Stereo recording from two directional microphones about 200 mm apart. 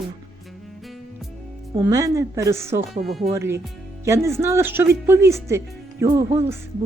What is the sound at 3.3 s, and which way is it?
Speech, 15° right (ahead or behind).